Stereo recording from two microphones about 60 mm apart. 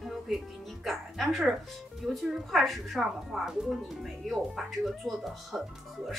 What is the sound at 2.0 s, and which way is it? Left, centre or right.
A woman's voice, centre.